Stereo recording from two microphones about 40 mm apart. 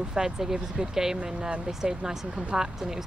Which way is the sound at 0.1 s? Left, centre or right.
Centre.